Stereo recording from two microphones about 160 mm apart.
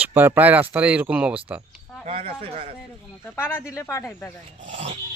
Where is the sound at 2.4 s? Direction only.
40° right (ahead or behind).